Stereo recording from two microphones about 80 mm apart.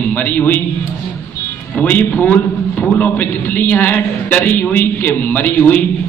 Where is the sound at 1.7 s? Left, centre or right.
Left.